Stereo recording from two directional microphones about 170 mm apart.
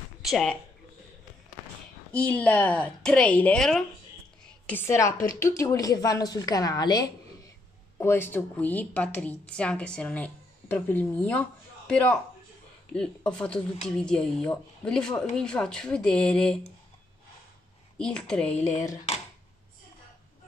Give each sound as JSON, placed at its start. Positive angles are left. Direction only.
{"t": 0.2, "sound": "speech", "side_deg": 0}
{"t": 2.1, "sound": "a woman's voice", "side_deg": 10}
{"t": 8.0, "sound": "a woman's voice", "side_deg": 15}
{"t": 17.9, "sound": "speech", "side_deg": 5}